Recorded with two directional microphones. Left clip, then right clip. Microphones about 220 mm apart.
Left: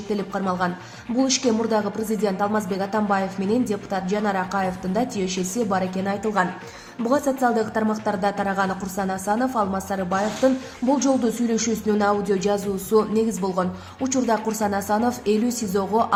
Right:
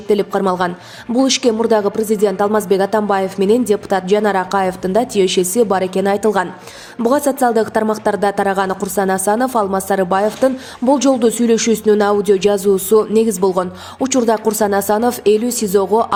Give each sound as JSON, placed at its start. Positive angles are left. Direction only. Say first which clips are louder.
{"t": 0.1, "sound": "a woman's voice", "louder": "right 11 dB", "side_deg": -40}